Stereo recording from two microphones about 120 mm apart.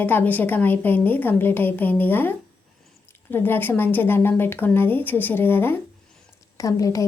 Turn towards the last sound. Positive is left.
turn(degrees=30)  # may be behind; listen again after turning